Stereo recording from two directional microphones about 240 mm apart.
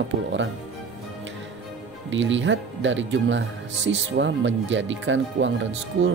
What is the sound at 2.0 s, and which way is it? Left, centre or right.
Speech, right.